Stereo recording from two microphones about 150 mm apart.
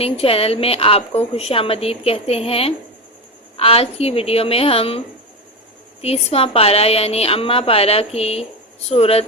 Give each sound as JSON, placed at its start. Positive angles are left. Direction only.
{"t": 0.0, "sound": "a woman's voice", "side_deg": 40}